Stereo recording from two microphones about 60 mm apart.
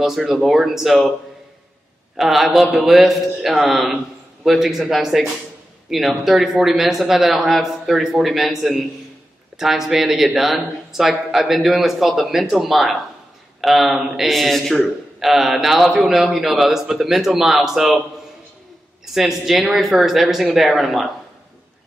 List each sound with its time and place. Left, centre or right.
0.0 s a man's voice: centre
2.1 s a man's voice: centre
19.1 s a man's voice: centre